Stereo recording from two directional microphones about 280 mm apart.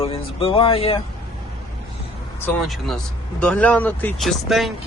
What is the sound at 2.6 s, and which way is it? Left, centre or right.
Speech, centre.